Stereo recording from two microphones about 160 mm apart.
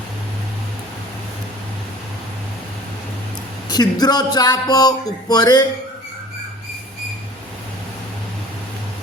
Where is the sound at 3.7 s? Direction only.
25° left (ahead or behind).